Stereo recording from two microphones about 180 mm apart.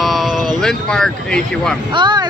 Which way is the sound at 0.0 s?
Centre (ahead or behind).